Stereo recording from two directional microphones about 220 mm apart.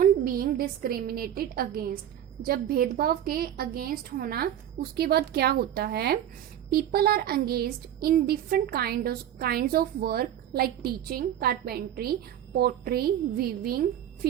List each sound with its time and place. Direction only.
0.0 s a woman's voice: 40° right (ahead or behind)